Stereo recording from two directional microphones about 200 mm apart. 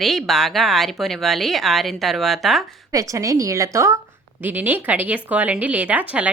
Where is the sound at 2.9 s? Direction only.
15° right (ahead or behind).